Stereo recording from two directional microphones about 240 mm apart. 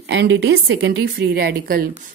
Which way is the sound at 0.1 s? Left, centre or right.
Right.